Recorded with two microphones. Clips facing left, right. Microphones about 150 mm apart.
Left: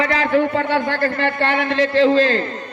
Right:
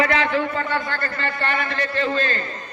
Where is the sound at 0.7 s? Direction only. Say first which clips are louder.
Left 7 dB; 80° left.